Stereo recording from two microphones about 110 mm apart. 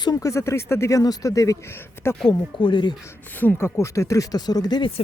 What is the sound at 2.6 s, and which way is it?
Speech, 50° left (ahead or behind).